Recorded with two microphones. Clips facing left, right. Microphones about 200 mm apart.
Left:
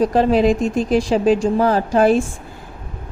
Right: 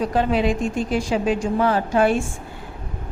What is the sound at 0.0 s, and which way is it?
Speech, 35° left (ahead or behind).